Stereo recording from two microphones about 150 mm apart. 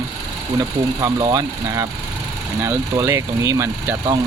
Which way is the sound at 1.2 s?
25° right (ahead or behind).